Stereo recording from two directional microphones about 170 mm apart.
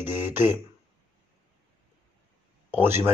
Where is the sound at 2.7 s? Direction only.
15° right (ahead or behind).